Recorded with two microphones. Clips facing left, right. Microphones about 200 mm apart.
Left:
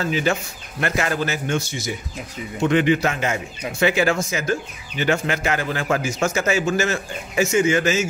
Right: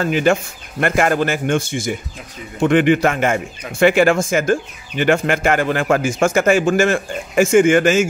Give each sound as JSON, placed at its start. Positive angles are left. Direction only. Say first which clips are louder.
{"t": 0.0, "sound": "speech", "louder": "right 6 dB", "side_deg": -55}